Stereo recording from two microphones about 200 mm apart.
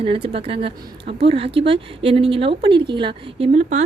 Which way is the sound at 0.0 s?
30° right (ahead or behind).